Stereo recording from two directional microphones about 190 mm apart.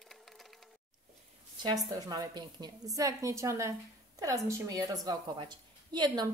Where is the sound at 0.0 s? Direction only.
Centre (ahead or behind).